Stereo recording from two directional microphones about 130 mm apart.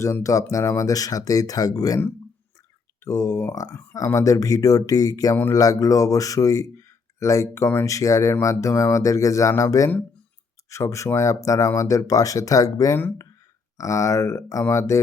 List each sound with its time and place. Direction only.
0.0 s speech: 25° left (ahead or behind)
3.0 s speech: 25° left (ahead or behind)